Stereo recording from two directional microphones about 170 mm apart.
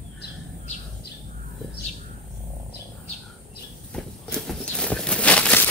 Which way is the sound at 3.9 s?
5° left (ahead or behind).